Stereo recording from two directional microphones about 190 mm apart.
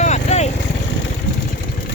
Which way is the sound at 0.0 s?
35° left (ahead or behind).